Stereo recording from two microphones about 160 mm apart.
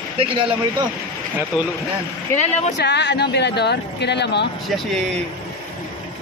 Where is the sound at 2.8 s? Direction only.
90° left.